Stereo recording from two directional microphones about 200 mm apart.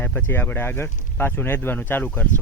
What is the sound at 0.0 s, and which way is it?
Speech, 10° left (ahead or behind).